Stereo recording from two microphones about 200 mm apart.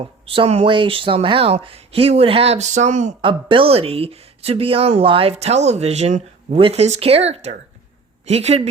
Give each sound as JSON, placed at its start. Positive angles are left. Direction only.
{"t": 0.0, "sound": "speech", "side_deg": -30}